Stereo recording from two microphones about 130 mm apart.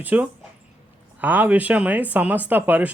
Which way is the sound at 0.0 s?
15° right (ahead or behind).